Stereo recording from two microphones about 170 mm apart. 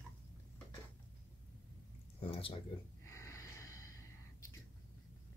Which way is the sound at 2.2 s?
35° left (ahead or behind).